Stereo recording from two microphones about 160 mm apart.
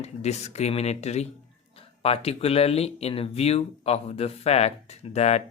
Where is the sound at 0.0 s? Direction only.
45° left (ahead or behind).